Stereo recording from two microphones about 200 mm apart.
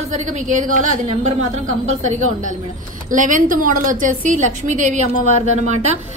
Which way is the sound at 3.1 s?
40° right (ahead or behind).